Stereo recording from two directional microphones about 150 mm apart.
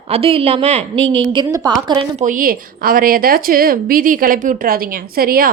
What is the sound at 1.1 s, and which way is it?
Speech, 30° right (ahead or behind).